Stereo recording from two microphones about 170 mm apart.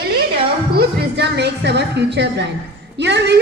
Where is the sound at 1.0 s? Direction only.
85° right.